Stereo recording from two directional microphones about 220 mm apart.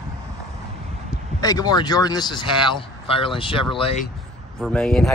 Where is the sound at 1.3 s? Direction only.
15° left (ahead or behind).